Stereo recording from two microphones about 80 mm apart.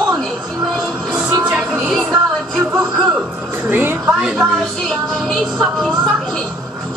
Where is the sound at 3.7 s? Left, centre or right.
Right.